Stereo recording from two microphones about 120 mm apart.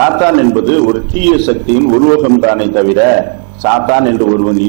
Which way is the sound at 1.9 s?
30° right (ahead or behind).